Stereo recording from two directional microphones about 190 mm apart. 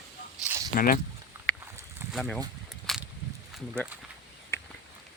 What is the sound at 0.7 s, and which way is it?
Speech, 45° left (ahead or behind).